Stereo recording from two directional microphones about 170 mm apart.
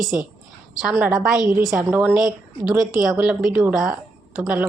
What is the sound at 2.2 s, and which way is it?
Speech, 25° left (ahead or behind).